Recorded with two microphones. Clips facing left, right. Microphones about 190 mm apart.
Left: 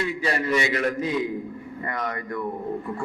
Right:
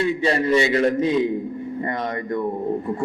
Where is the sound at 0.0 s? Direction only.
25° right (ahead or behind).